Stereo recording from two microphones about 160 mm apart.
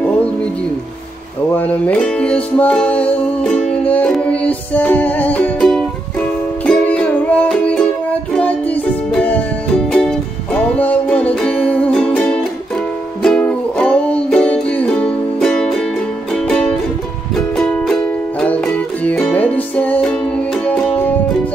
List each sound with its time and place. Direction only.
1.5 s music: 10° left (ahead or behind)